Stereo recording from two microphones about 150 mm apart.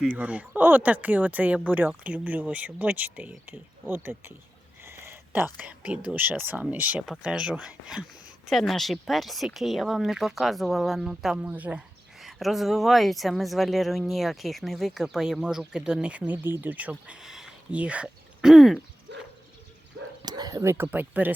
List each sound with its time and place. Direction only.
0.1 s speech: 10° right (ahead or behind)
4.9 s a sound: 15° right (ahead or behind)
5.5 s a woman's voice: 10° right (ahead or behind)
20.2 s speech: 25° right (ahead or behind)